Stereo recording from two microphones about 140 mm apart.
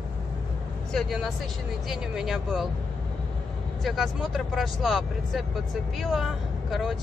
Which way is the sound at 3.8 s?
Centre (ahead or behind).